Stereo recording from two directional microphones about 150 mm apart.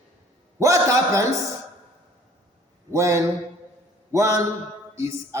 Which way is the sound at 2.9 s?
20° right (ahead or behind).